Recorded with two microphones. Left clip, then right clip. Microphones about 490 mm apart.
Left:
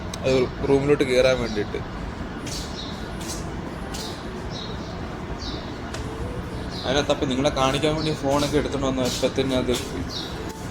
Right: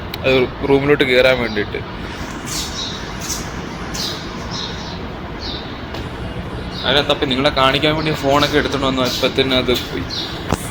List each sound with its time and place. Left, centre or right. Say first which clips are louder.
0.3 s speech: right 6 dB; left
6.8 s speech: right 7 dB; left